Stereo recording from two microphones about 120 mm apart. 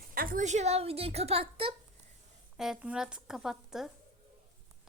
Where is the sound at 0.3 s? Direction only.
75° right (ahead or behind); by 1.7 s 55° right (ahead or behind).